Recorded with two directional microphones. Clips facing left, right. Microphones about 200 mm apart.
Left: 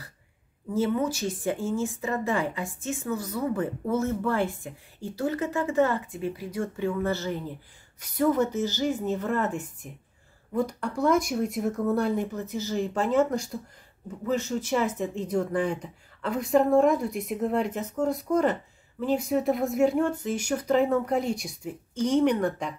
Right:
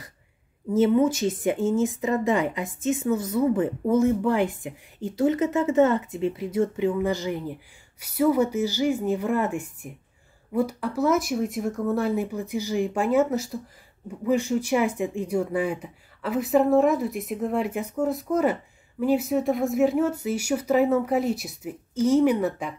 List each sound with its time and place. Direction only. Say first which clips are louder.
0.7 s speech: right 6 dB; 20° right (ahead or behind); by 22.8 s 5° right (ahead or behind)